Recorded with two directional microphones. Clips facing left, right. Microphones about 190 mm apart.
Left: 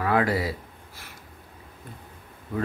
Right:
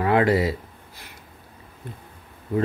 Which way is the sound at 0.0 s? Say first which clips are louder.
Right 4 dB; 25° right (ahead or behind).